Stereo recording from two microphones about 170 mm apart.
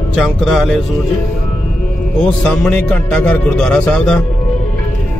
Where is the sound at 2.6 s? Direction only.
10° left (ahead or behind).